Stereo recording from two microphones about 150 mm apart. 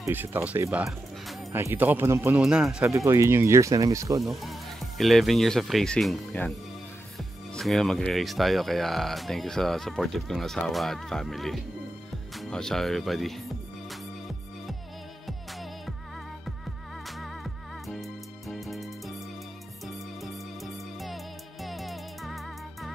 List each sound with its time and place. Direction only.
0.0 s speech: 15° right (ahead or behind)
2.4 s speech: 5° right (ahead or behind)
3.1 s speech: 20° right (ahead or behind)
4.2 s speech: centre (ahead or behind)
13.8 s music: centre (ahead or behind)
17.2 s music: centre (ahead or behind)
20.2 s music: centre (ahead or behind)